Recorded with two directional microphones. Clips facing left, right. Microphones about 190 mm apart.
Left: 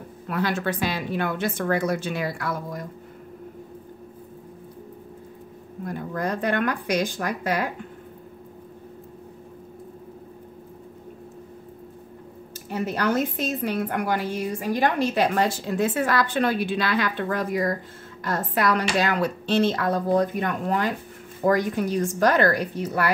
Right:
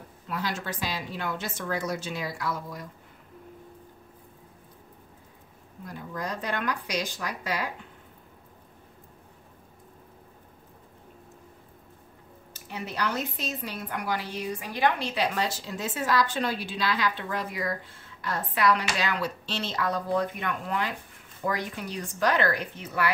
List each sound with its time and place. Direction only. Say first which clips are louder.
0.3 s a woman's voice: left 7 dB; 60° left (ahead or behind)
5.9 s a woman's voice: left 7 dB; 55° left (ahead or behind)
12.5 s a woman's voice: left 6 dB; 45° left (ahead or behind)